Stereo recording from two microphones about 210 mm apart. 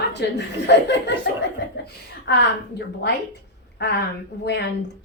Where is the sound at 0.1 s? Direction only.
55° left (ahead or behind).